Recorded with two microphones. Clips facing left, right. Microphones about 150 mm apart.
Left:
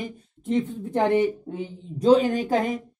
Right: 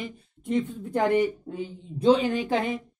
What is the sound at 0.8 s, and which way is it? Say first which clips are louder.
Speech: left 2 dB; 25° left (ahead or behind).